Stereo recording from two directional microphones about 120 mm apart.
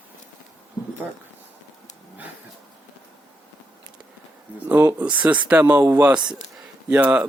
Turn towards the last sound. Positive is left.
turn(degrees=-10)  # may be behind; listen again after turning